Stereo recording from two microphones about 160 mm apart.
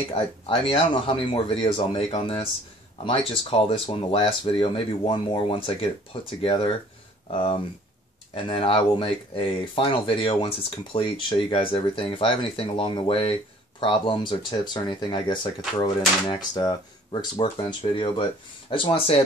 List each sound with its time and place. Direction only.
0.1 s speech: 35° left (ahead or behind)